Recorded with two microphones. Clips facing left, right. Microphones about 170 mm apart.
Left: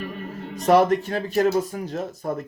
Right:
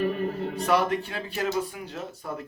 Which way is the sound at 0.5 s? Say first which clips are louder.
Left 9 dB; 45° left (ahead or behind).